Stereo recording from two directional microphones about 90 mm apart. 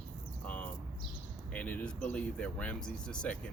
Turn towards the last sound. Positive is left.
turn(degrees=10)  # may be behind; listen again after turning